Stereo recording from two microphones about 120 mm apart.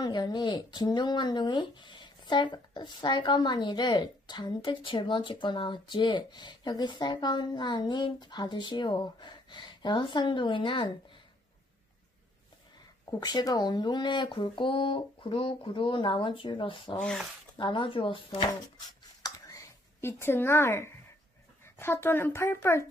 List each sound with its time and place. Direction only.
0.0 s speech: 35° left (ahead or behind)
13.1 s speech: 35° left (ahead or behind)
17.0 s speech: 5° left (ahead or behind)
17.6 s speech: 40° left (ahead or behind)
19.2 s a sound: 30° left (ahead or behind)
21.7 s speech: 20° left (ahead or behind)